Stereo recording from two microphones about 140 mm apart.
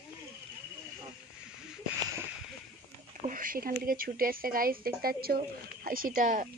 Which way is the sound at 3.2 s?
75° right (ahead or behind).